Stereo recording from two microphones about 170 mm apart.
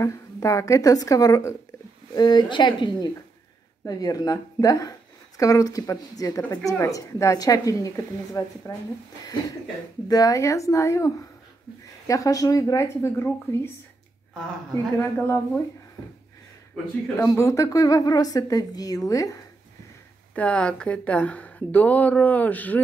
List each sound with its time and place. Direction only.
0.0 s speech: 20° left (ahead or behind)
10.0 s speech: 20° left (ahead or behind)
12.1 s speech: 20° left (ahead or behind)
15.0 s speech: 15° left (ahead or behind)
17.2 s speech: 15° left (ahead or behind)
20.3 s speech: 5° left (ahead or behind)